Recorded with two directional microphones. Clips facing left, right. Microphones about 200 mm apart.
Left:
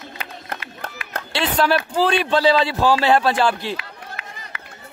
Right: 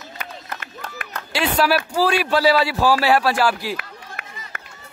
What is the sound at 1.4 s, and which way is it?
Speech, 5° right (ahead or behind).